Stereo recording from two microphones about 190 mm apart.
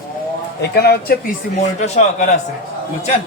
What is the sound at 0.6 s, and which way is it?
Speech, 60° left (ahead or behind).